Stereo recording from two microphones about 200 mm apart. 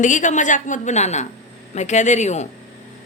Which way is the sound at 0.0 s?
40° left (ahead or behind).